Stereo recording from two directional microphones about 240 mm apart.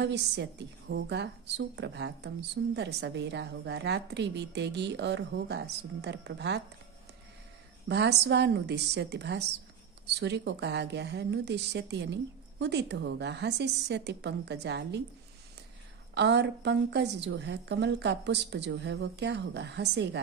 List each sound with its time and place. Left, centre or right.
0.0 s a woman's voice: right
7.9 s a woman's voice: right
16.2 s a woman's voice: right